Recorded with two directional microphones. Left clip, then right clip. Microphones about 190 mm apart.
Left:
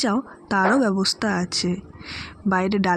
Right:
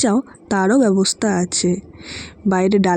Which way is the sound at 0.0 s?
25° right (ahead or behind).